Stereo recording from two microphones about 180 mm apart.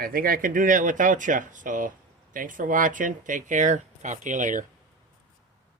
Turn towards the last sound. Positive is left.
turn(degrees=-45)  # may be behind; listen again after turning